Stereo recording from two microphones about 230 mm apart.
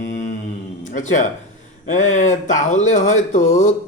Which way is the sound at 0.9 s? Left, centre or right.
Left.